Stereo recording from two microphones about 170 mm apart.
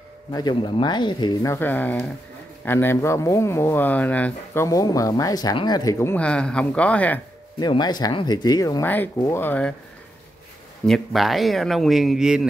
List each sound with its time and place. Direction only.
0.3 s speech: 25° left (ahead or behind)
4.6 s speech: 20° left (ahead or behind)
7.6 s speech: 25° left (ahead or behind)
8.8 s speech: 10° left (ahead or behind)
10.9 s speech: centre (ahead or behind)